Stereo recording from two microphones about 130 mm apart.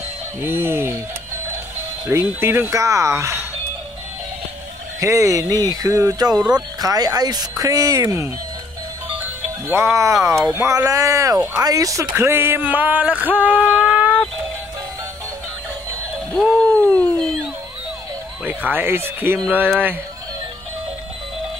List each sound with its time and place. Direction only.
0.4 s a sound: 20° right (ahead or behind)
2.0 s speech: 20° right (ahead or behind)
5.0 s speech: 25° right (ahead or behind)
6.3 s a sound: 5° right (ahead or behind)
6.8 s speech: 30° right (ahead or behind)
9.7 s speech: 20° right (ahead or behind)
12.1 s a sound: 20° right (ahead or behind)
16.7 s dog: 10° left (ahead or behind)
18.4 s speech: 10° right (ahead or behind)